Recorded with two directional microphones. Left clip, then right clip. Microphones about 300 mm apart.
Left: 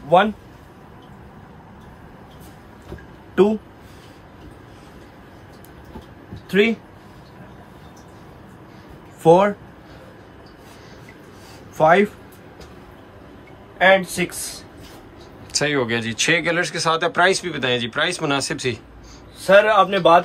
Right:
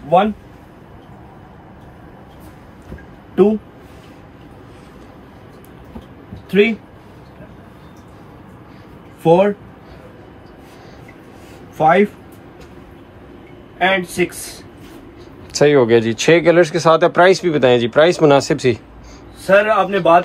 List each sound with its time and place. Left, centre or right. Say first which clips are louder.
6.5 s speech: right 4 dB; centre
9.2 s speech: right 1 dB; centre
11.8 s speech: right 2 dB; centre
13.7 s speech: left 1 dB; centre
15.5 s speech: right 9 dB; centre
19.4 s a man's voice: even; centre